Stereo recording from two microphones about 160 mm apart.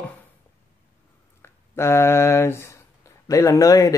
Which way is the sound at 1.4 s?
15° left (ahead or behind).